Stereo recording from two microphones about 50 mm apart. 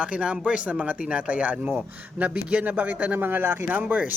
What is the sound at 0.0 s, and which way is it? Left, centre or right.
A man's voice, right.